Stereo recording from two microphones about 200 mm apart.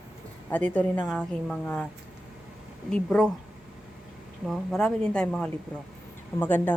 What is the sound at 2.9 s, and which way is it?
Speech, 5° left (ahead or behind).